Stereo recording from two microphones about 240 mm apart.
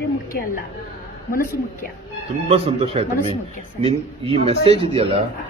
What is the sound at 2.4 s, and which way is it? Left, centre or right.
Speech, right.